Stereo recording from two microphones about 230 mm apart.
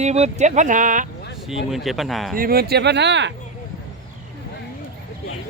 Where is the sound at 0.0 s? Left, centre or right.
Right.